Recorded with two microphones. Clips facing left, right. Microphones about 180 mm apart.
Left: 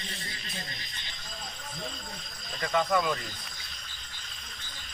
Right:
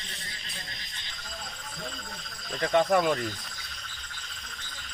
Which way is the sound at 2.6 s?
35° right (ahead or behind).